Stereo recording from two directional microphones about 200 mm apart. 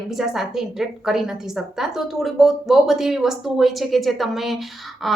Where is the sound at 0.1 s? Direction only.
Centre (ahead or behind).